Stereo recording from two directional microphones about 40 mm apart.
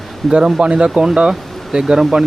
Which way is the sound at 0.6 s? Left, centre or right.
Right.